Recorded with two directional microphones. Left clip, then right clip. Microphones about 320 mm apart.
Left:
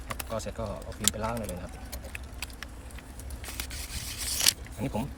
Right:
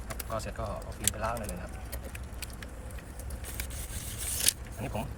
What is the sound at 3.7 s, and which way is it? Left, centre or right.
Scissors, centre.